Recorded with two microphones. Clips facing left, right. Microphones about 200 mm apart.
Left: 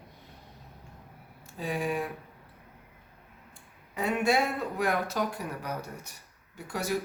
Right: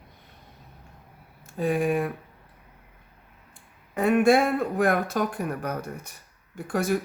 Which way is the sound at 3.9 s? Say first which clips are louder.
Right 7 dB; 50° right (ahead or behind).